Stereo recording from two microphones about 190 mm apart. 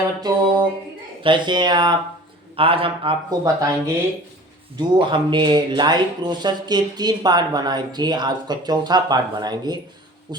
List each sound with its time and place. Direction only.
0.2 s speech: 25° right (ahead or behind)
4.8 s speech: 25° right (ahead or behind)